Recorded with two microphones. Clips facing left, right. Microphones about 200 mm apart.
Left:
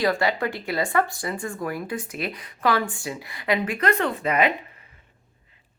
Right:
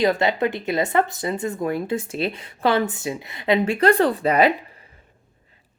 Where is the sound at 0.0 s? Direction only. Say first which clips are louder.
Right 3 dB; 20° right (ahead or behind).